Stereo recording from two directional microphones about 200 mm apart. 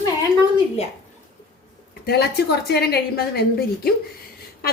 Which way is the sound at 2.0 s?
50° left (ahead or behind).